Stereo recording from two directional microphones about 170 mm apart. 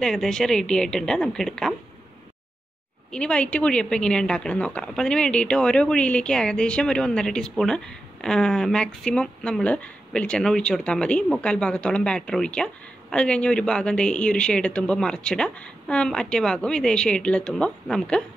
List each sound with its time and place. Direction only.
0.0 s a woman's voice: 5° left (ahead or behind)
3.1 s a woman's voice: 5° left (ahead or behind)